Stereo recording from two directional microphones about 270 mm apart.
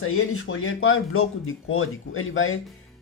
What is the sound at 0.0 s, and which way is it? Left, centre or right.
Speech, left.